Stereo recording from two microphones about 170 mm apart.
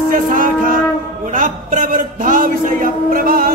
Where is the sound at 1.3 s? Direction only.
50° right (ahead or behind).